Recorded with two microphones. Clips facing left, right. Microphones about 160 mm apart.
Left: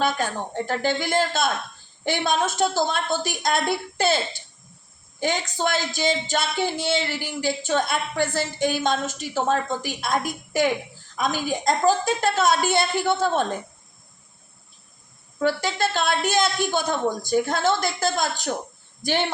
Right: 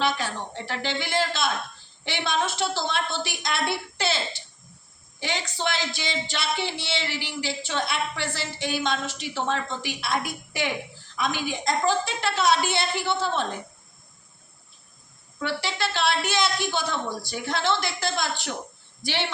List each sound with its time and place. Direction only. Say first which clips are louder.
0.0 s speech: left 3 dB; 50° left (ahead or behind)
15.4 s speech: left 6 dB; 45° left (ahead or behind)